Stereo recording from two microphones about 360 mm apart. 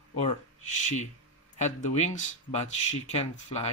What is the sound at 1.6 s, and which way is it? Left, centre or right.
Speech, centre.